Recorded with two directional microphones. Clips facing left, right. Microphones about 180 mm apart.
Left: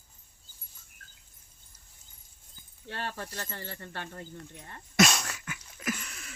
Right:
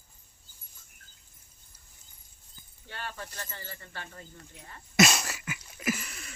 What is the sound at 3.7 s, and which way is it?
Speech, 60° left (ahead or behind).